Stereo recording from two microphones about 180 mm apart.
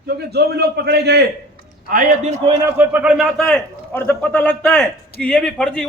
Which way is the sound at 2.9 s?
5° right (ahead or behind).